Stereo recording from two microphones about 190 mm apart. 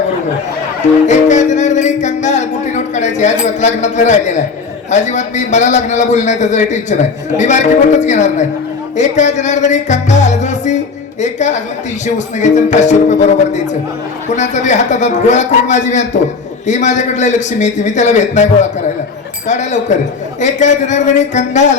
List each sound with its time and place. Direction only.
1.0 s music: 40° left (ahead or behind)
3.4 s a man's voice: 40° left (ahead or behind)
19.5 s a man's voice: 40° left (ahead or behind)